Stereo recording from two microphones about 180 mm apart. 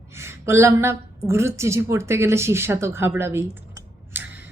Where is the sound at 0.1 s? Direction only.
15° right (ahead or behind).